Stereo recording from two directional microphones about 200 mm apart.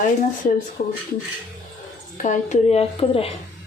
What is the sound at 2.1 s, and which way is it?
A woman's voice, 40° left (ahead or behind).